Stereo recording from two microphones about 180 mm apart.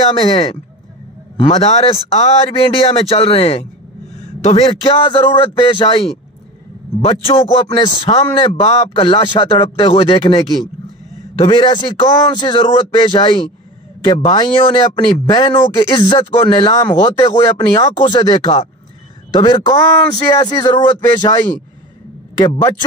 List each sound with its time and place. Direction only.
0.1 s a man's voice: 35° left (ahead or behind)
22.6 s speech: 20° left (ahead or behind)